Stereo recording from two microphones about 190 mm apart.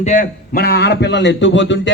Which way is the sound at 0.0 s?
40° left (ahead or behind).